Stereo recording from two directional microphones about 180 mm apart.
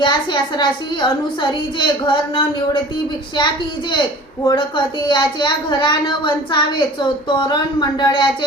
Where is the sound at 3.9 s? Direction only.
25° left (ahead or behind).